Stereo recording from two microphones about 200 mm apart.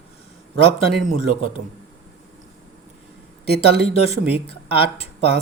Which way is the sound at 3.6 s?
30° left (ahead or behind).